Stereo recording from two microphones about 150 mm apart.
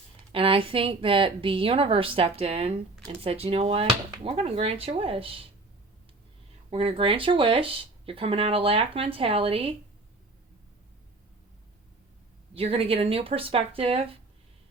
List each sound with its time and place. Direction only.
0.3 s speech: 35° right (ahead or behind)
6.7 s speech: 40° right (ahead or behind)
12.5 s speech: 40° right (ahead or behind)